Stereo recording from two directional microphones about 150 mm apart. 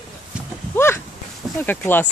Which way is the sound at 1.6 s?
15° left (ahead or behind).